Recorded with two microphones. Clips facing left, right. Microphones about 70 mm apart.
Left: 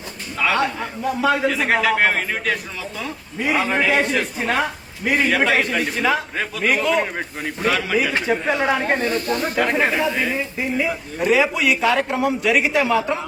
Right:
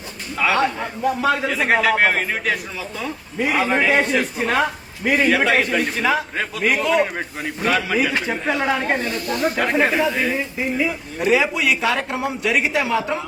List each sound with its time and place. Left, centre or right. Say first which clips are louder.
0.3 s a man's voice: right 1 dB; centre
8.6 s speech: left 1 dB; left
9.6 s a man's voice: even; centre